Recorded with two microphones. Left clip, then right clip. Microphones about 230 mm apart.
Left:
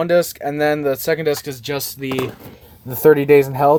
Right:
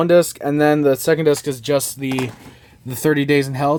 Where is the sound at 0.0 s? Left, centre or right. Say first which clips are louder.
Right 2 dB; right.